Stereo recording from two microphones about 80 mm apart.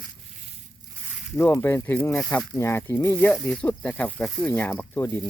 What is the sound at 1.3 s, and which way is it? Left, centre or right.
Speech, left.